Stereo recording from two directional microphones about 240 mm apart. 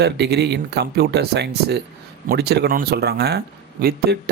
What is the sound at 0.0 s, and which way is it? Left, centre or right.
Speech, right.